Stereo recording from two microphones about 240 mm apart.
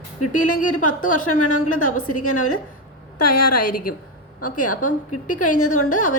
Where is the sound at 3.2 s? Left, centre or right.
Left.